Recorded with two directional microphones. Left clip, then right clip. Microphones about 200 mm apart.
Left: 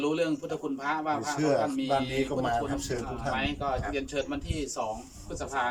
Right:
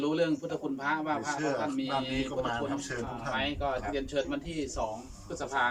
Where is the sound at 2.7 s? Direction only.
25° left (ahead or behind).